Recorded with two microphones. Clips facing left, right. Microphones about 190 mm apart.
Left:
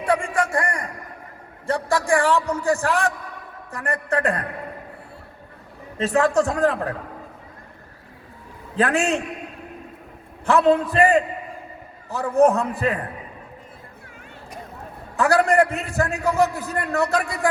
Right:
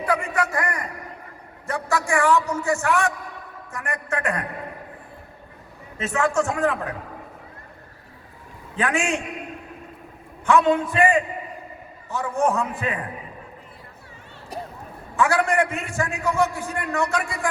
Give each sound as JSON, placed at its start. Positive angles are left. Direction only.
{"t": 0.0, "sound": "a sound", "side_deg": 25}
{"t": 0.3, "sound": "a man's voice", "side_deg": 30}
{"t": 6.0, "sound": "a man's voice", "side_deg": 35}
{"t": 8.7, "sound": "a man's voice", "side_deg": 35}
{"t": 10.4, "sound": "a man's voice", "side_deg": 35}
{"t": 15.1, "sound": "a man's voice", "side_deg": 40}